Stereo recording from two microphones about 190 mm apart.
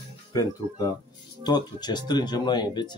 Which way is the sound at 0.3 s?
20° left (ahead or behind).